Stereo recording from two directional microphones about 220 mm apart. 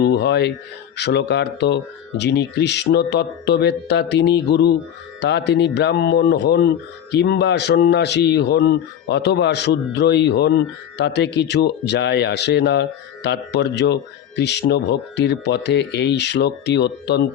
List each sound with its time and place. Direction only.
0.0 s speech: 50° left (ahead or behind)